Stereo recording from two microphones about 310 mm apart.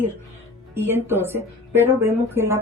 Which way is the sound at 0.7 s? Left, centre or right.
Centre.